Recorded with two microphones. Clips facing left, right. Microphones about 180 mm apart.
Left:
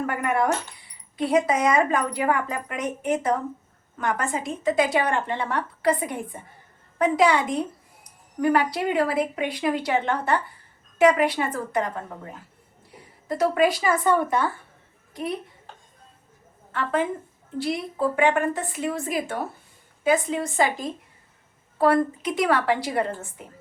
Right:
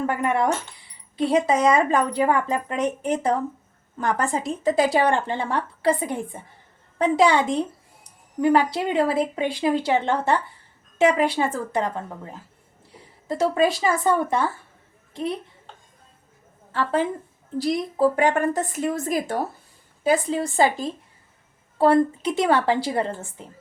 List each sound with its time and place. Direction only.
0.1 s a woman's voice: 25° right (ahead or behind)
13.2 s speech: 25° right (ahead or behind)
16.7 s a woman's voice: 30° right (ahead or behind)
18.2 s a woman's voice: 40° right (ahead or behind)